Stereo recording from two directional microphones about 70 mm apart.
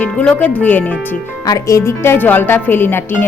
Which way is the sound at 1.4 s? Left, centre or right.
Left.